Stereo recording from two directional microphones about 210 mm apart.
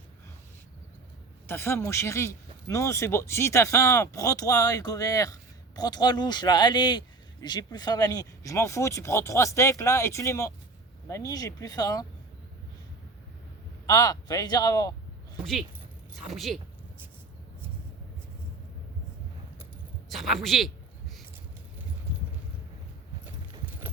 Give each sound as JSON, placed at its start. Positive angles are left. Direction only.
{"t": 1.5, "sound": "speech", "side_deg": 10}
{"t": 13.8, "sound": "speech", "side_deg": 15}
{"t": 16.2, "sound": "speech", "side_deg": 0}
{"t": 20.1, "sound": "speech", "side_deg": 0}